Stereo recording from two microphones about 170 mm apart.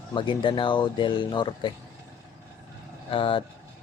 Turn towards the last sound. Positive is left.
turn(degrees=30)  # may be behind; listen again after turning